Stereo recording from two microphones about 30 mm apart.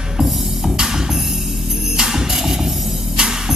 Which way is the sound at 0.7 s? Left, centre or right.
Right.